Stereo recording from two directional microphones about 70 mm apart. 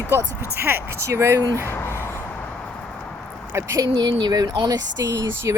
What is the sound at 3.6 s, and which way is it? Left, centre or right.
Speech, right.